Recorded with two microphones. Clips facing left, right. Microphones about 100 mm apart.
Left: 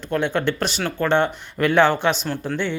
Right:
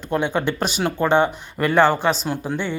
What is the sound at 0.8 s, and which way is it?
Speech, 20° right (ahead or behind).